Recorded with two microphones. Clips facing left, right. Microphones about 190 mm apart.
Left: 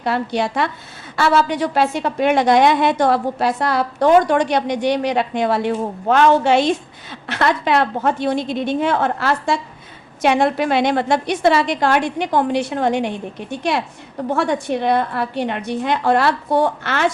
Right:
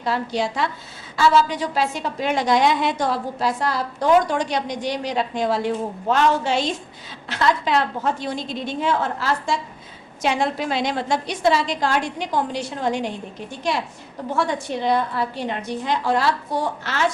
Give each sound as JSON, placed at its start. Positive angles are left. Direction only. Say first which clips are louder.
{"t": 0.0, "sound": "a woman's voice", "louder": "left 3 dB", "side_deg": 60}